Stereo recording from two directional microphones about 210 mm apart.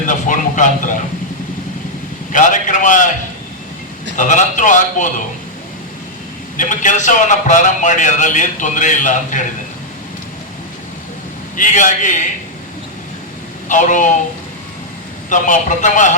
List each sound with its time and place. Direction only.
0.0 s a man's voice: 40° left (ahead or behind)
2.3 s a man's voice: 40° left (ahead or behind)
4.2 s a man's voice: 35° left (ahead or behind)
6.6 s a man's voice: 35° left (ahead or behind)
11.5 s a man's voice: 40° left (ahead or behind)
13.7 s a man's voice: 35° left (ahead or behind)
15.3 s a man's voice: 35° left (ahead or behind)